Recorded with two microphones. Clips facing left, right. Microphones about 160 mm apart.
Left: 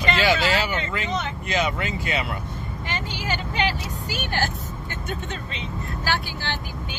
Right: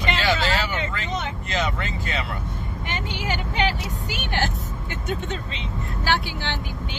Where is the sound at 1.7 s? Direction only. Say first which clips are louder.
Left 2 dB; 15° left (ahead or behind).